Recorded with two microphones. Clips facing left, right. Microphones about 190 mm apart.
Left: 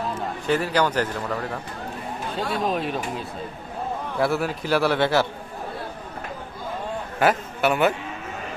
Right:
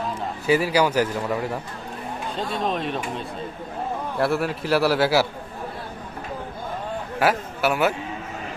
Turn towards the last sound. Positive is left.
turn(degrees=-5)  # may be behind; listen again after turning